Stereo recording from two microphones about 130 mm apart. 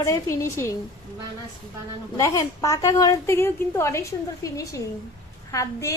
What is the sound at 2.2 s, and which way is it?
A woman's voice, 25° left (ahead or behind).